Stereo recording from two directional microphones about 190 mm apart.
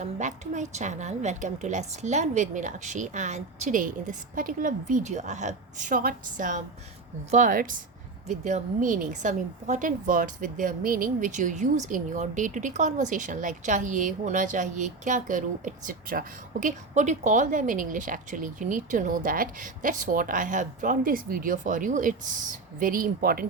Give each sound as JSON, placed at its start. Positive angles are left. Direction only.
{"t": 0.0, "sound": "a woman's voice", "side_deg": -40}